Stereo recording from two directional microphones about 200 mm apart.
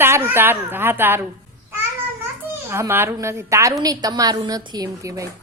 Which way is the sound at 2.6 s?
10° right (ahead or behind).